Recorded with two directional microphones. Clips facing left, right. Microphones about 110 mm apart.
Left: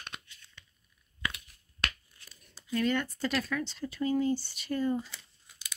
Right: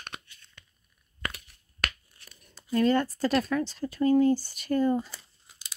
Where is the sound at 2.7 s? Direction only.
35° right (ahead or behind).